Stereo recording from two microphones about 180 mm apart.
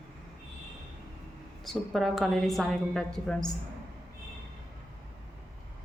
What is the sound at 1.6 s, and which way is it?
A woman's voice, centre (ahead or behind).